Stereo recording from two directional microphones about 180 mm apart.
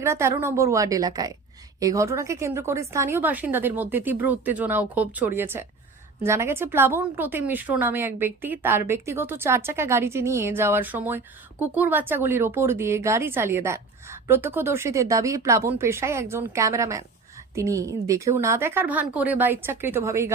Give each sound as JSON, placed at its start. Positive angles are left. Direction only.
{"t": 0.0, "sound": "speech", "side_deg": -15}